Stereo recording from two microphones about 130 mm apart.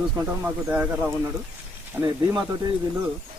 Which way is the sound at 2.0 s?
25° right (ahead or behind).